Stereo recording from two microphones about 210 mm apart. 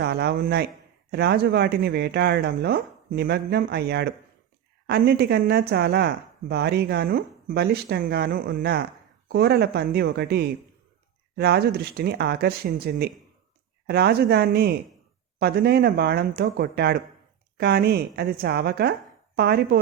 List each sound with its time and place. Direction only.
0.0 s speech: 50° right (ahead or behind)